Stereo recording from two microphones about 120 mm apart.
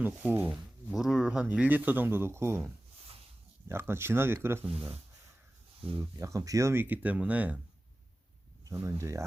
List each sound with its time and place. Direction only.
0.0 s speech: 15° right (ahead or behind)
0.5 s speech: 5° right (ahead or behind); by 2.6 s 20° right (ahead or behind)
3.7 s speech: 20° right (ahead or behind)
6.0 s speech: 25° right (ahead or behind); by 7.6 s 10° right (ahead or behind)
8.6 s speech: 25° right (ahead or behind)